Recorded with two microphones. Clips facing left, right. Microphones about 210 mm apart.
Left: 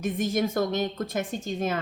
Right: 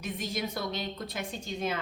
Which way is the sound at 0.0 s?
50° left (ahead or behind).